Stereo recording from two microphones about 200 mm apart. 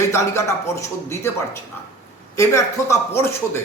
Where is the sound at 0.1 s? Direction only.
15° left (ahead or behind).